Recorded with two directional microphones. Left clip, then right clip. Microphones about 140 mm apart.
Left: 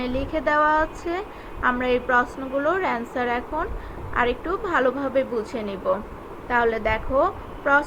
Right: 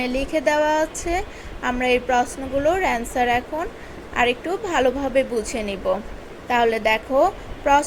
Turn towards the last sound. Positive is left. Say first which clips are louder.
# right 2 dB
turn(degrees=-30)  # may be behind; listen again after turning